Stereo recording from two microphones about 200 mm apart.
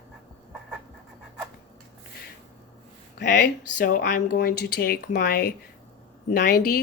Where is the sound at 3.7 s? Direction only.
45° left (ahead or behind).